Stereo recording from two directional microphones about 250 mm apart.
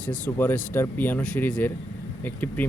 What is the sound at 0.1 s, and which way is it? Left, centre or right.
Speech, centre.